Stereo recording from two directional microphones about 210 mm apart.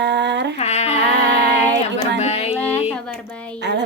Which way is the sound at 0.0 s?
55° right (ahead or behind).